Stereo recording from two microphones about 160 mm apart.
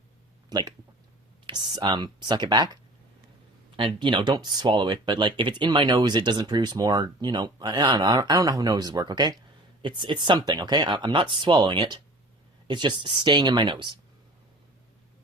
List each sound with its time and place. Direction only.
0.5 s speech: 25° right (ahead or behind)
3.8 s speech: 30° right (ahead or behind)